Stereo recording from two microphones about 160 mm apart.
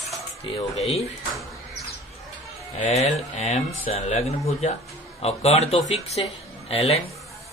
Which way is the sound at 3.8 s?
40° left (ahead or behind).